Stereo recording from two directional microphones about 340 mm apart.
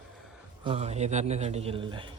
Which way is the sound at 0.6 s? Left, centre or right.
Centre.